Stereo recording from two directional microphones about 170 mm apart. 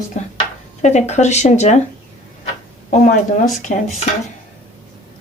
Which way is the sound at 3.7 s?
60° left (ahead or behind).